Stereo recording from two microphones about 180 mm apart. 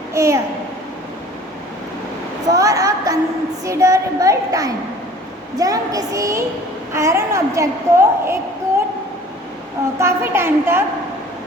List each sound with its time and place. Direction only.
0.1 s a child's voice: 15° right (ahead or behind)
2.5 s a sound: 20° right (ahead or behind)
3.7 s a woman's voice: 15° right (ahead or behind)
10.0 s a woman's voice: 15° right (ahead or behind)